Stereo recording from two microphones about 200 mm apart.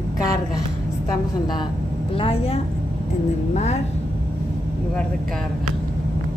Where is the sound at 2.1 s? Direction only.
30° left (ahead or behind).